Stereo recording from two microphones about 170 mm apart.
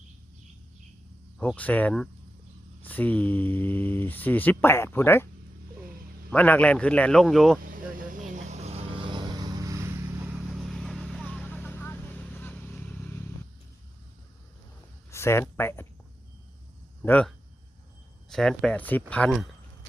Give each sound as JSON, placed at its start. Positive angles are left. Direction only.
{"t": 1.4, "sound": "speech", "side_deg": 10}
{"t": 6.3, "sound": "speech", "side_deg": 10}
{"t": 7.6, "sound": "vehicle", "side_deg": -55}
{"t": 10.5, "sound": "vehicle", "side_deg": 0}
{"t": 15.1, "sound": "speech", "side_deg": 15}
{"t": 17.0, "sound": "speech", "side_deg": 5}